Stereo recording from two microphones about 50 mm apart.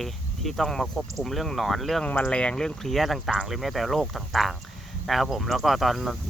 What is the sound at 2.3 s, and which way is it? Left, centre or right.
Speech, left.